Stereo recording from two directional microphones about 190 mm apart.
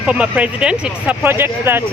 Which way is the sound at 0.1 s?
5° right (ahead or behind).